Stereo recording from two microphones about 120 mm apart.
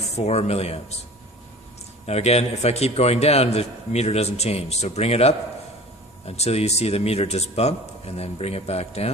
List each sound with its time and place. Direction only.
0.1 s a man's voice: 60° left (ahead or behind)
2.0 s a man's voice: 60° left (ahead or behind)